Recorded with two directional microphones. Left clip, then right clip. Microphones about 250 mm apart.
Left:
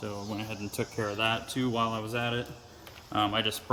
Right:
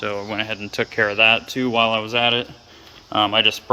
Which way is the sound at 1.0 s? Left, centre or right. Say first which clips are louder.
Right 15 dB; right.